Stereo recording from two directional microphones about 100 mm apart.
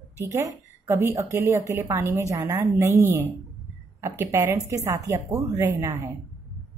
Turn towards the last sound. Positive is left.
turn(degrees=-25)  # may be behind; listen again after turning